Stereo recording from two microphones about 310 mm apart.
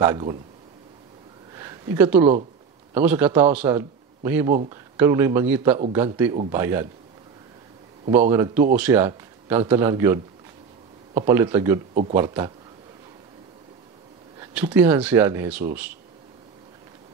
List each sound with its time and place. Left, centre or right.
0.0 s speech: centre
1.5 s a sound: centre
2.9 s a man's voice: centre
8.1 s speech: centre
11.9 s speech: right
12.2 s speech: centre
14.7 s speech: centre